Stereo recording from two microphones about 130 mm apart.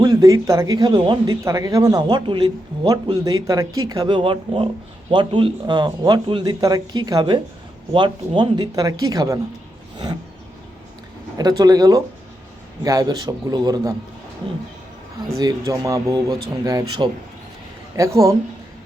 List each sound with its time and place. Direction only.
0.0 s speech: 30° right (ahead or behind)
11.3 s speech: 30° right (ahead or behind)
15.3 s speech: 30° right (ahead or behind)